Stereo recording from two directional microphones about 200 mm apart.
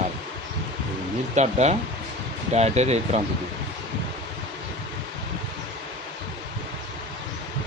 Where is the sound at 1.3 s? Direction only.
35° right (ahead or behind).